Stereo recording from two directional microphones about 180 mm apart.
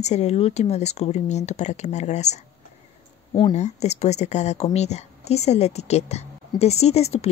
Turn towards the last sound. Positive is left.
turn(degrees=35)  # may be behind; listen again after turning